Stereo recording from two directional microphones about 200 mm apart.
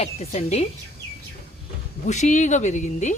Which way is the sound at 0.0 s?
30° left (ahead or behind).